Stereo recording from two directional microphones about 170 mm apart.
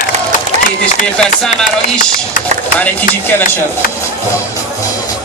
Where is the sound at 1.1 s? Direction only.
5° left (ahead or behind).